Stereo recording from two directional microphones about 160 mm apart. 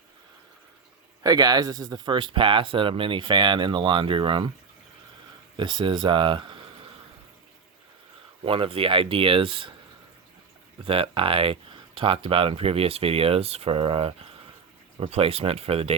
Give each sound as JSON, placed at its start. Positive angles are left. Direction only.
{"t": 1.2, "sound": "speech", "side_deg": -25}
{"t": 5.5, "sound": "speech", "side_deg": -30}
{"t": 8.4, "sound": "speech", "side_deg": -35}
{"t": 10.8, "sound": "speech", "side_deg": -35}